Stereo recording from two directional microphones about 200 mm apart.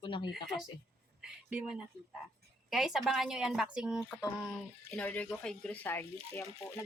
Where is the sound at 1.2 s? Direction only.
5° right (ahead or behind).